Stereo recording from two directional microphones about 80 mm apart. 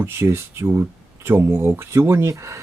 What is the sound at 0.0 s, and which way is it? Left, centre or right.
Speech, right.